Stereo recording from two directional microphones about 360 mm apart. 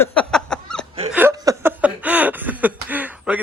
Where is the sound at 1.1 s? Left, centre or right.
Centre.